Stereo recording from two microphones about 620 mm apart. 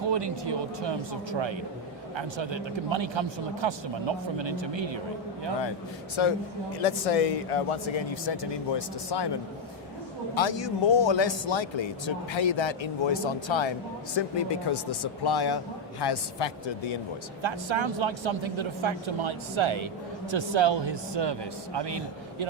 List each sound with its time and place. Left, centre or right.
0.1 s speech: right
6.2 s speech: left
6.7 s speech: left
10.3 s a man's voice: left
17.4 s speech: right